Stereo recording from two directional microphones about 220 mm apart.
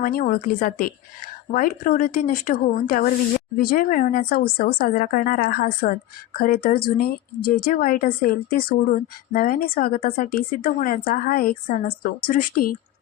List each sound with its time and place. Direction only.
0.0 s speech: 40° left (ahead or behind)